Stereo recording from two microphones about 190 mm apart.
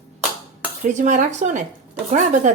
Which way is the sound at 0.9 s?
40° right (ahead or behind).